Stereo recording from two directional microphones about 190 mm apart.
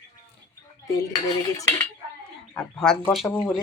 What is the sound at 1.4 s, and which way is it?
Speech, 15° left (ahead or behind).